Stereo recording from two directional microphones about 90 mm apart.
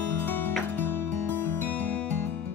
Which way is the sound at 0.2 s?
20° left (ahead or behind).